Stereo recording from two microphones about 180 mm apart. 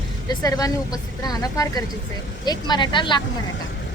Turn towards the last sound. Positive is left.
turn(degrees=25)  # may be behind; listen again after turning